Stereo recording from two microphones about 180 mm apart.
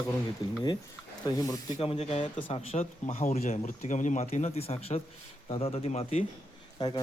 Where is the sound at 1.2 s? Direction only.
20° left (ahead or behind); by 6.3 s 35° left (ahead or behind).